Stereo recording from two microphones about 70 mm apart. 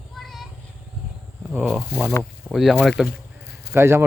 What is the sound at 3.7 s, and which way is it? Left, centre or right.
Speech, right.